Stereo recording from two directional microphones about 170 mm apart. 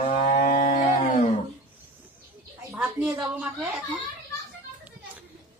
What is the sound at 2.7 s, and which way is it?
Speech, 10° right (ahead or behind).